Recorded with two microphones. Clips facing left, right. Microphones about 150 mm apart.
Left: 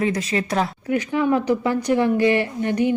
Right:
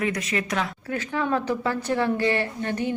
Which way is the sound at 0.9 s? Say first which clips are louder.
Left 6 dB; 15° left (ahead or behind).